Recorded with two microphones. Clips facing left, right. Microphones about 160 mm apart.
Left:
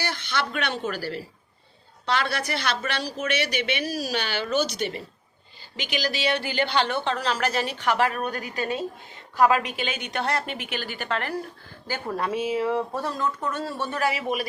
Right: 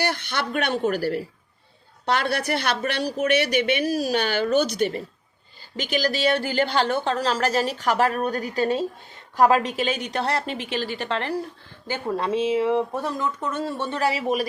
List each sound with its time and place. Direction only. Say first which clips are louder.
0.0 s a woman's voice: right 3 dB; 55° right (ahead or behind); by 13.8 s 20° right (ahead or behind)
13.9 s a woman's voice: right 3 dB; 35° right (ahead or behind)